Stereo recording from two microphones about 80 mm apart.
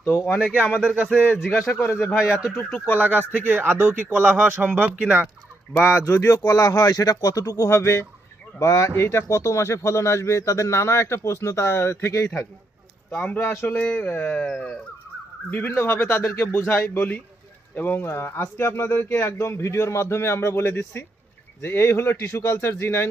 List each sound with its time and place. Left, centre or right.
0.0 s speech: left
0.9 s speech: centre
1.8 s speech: left
2.6 s speech: centre
3.0 s speech: right
5.9 s speech: left
13.1 s speech: centre
13.4 s speech: left